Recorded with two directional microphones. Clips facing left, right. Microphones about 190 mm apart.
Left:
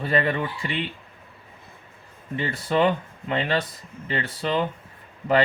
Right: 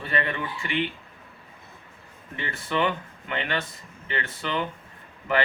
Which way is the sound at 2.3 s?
35° left (ahead or behind).